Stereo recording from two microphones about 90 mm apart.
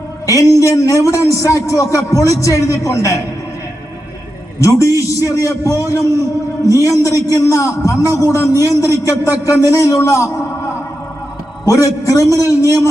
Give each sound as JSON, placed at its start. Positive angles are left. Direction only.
{"t": 0.3, "sound": "a man's voice", "side_deg": 35}
{"t": 4.6, "sound": "a man's voice", "side_deg": 35}
{"t": 11.6, "sound": "a man's voice", "side_deg": 35}